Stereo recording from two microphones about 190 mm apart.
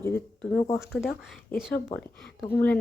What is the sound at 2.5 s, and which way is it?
Speech, 10° left (ahead or behind).